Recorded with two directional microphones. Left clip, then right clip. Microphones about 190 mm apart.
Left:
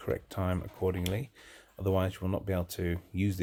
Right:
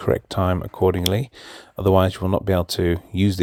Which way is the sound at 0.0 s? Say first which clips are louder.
Right 13 dB; 45° right (ahead or behind).